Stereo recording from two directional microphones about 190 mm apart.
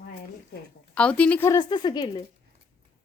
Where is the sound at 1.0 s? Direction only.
5° left (ahead or behind); by 2.1 s 20° left (ahead or behind).